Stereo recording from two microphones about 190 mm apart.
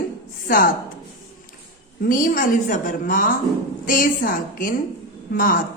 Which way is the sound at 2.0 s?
45° left (ahead or behind).